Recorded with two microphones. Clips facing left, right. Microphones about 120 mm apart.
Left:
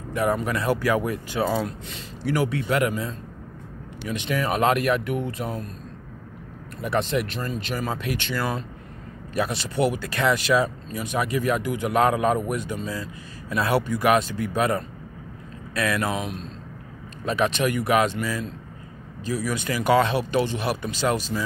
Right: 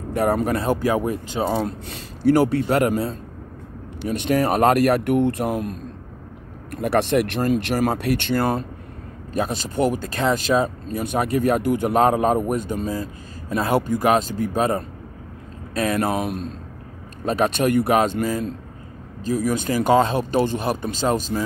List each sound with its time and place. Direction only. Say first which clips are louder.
0.1 s speech: right 4 dB; 40° right (ahead or behind)
0.7 s speech: left 1 dB; 25° right (ahead or behind)
1.6 s speech: right 3 dB; 40° right (ahead or behind)
4.0 s a man's voice: right 6 dB; 50° right (ahead or behind); by 5.8 s 70° right (ahead or behind)
6.7 s a man's voice: right 5 dB; 60° right (ahead or behind); by 21.4 s 45° right (ahead or behind)